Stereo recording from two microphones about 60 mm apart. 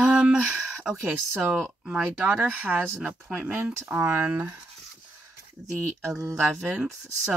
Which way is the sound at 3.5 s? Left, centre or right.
Right.